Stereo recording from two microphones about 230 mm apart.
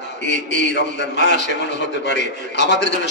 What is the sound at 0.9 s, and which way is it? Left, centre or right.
A man's voice, left.